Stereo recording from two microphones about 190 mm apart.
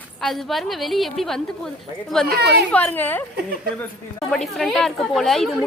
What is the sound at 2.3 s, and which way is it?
Speech, 60° right (ahead or behind).